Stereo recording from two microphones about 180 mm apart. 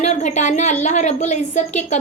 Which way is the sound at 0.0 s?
40° left (ahead or behind).